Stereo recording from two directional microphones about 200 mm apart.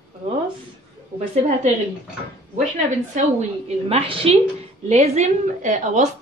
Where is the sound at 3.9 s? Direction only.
30° right (ahead or behind).